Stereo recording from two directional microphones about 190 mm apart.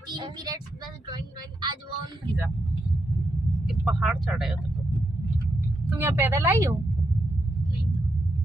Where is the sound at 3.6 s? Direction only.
Centre (ahead or behind).